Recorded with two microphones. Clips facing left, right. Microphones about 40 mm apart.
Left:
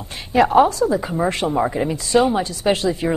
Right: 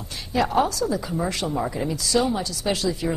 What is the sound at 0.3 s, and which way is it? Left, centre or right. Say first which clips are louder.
Speech: left 7 dB; left.